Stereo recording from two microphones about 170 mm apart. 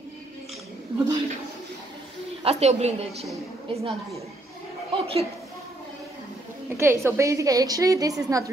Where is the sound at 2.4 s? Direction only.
40° right (ahead or behind).